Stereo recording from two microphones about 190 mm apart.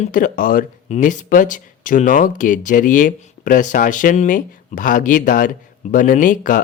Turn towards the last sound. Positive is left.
turn(degrees=45)  # may be behind; listen again after turning